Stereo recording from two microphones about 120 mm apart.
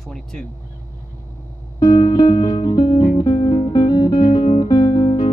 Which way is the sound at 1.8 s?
35° left (ahead or behind).